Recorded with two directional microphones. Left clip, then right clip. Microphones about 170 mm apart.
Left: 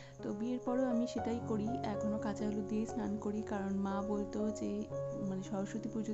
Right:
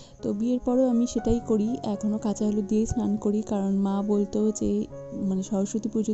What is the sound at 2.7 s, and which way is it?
Speech, 10° right (ahead or behind).